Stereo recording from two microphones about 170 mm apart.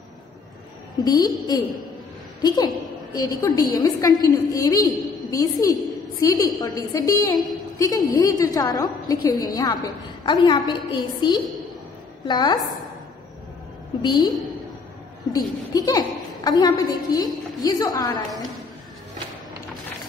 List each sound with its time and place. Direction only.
0.9 s a woman's voice: 25° left (ahead or behind)
14.0 s a woman's voice: 25° left (ahead or behind)
15.3 s a woman's voice: 20° left (ahead or behind)